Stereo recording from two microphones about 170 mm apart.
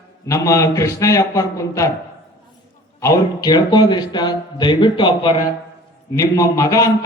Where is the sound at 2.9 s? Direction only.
20° left (ahead or behind).